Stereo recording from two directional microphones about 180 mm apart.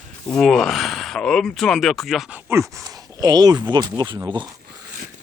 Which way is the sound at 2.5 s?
15° right (ahead or behind).